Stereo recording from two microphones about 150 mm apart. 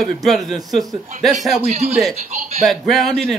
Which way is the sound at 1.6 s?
45° right (ahead or behind).